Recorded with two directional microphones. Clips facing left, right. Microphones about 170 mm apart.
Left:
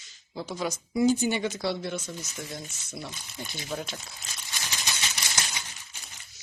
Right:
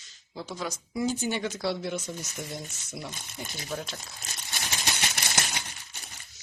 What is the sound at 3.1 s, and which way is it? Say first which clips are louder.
Speech: right 1 dB; 55° right (ahead or behind).